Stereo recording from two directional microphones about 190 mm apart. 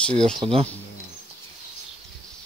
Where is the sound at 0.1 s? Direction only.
30° right (ahead or behind).